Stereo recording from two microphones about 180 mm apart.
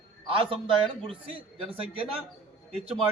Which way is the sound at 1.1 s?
30° right (ahead or behind).